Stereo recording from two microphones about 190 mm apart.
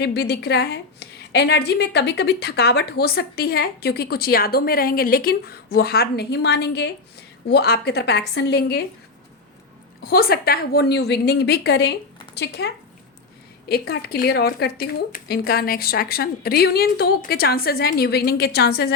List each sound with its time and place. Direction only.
0.0 s a woman's voice: 60° left (ahead or behind)
10.0 s a woman's voice: 55° left (ahead or behind)